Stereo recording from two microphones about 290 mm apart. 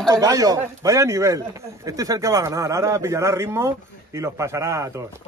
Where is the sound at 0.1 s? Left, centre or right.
Centre.